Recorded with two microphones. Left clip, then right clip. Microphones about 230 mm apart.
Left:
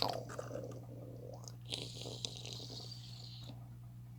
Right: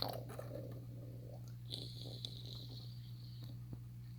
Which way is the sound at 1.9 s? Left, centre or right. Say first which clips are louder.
Left 5 dB; left.